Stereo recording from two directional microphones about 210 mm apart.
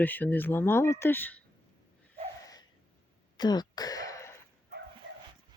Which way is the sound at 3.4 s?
20° left (ahead or behind).